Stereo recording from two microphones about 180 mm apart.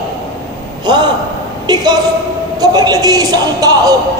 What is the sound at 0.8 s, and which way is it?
Speech, 25° right (ahead or behind).